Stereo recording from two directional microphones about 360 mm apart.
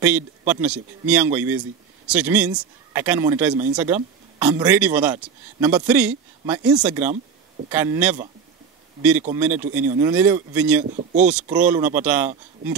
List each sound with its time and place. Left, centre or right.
0.0 s speech: centre
9.2 s speech: centre
10.9 s speech: right
11.2 s speech: centre